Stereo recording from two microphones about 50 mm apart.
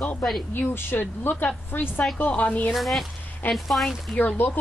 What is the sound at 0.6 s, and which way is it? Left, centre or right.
A woman's voice, left.